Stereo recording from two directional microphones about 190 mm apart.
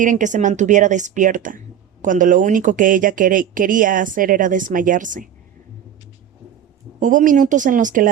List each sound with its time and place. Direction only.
0.0 s speech: 40° right (ahead or behind)
7.0 s speech: 40° right (ahead or behind)